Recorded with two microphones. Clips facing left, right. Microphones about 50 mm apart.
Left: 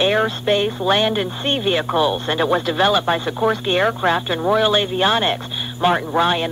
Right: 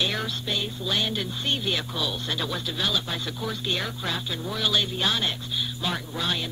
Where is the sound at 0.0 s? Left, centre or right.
Left.